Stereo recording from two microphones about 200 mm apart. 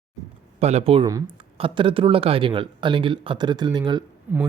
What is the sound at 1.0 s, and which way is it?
Speech, 15° right (ahead or behind).